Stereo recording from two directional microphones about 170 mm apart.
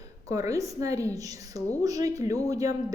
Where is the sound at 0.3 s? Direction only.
20° right (ahead or behind).